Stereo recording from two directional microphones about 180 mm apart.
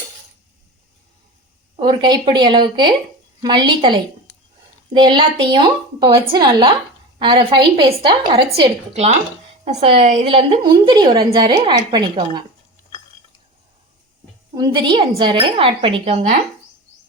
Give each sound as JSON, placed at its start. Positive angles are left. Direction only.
{"t": 1.7, "sound": "a woman's voice", "side_deg": -25}
{"t": 4.9, "sound": "a woman's voice", "side_deg": -25}
{"t": 14.5, "sound": "a woman's voice", "side_deg": -25}